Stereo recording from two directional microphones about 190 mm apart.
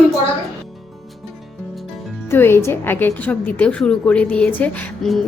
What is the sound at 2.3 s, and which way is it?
A woman's voice, 10° left (ahead or behind).